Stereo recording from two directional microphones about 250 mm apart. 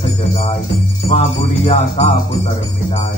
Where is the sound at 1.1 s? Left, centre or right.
Left.